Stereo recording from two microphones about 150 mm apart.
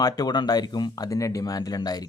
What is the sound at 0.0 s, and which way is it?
Speech, 25° left (ahead or behind).